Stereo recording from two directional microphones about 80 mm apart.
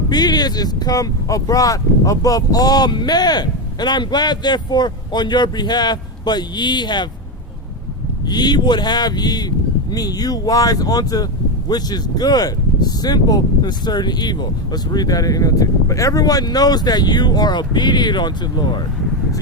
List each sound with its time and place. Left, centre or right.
0.1 s speech: left
8.3 s speech: left